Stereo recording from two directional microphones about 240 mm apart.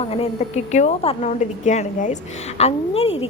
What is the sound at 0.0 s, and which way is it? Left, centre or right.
A woman's voice, left.